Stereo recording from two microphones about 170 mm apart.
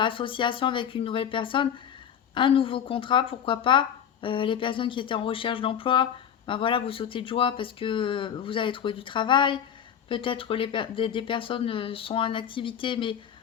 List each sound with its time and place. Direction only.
0.0 s speech: 30° left (ahead or behind)